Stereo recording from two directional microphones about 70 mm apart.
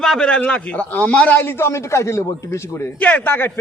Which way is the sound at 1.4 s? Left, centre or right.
Left.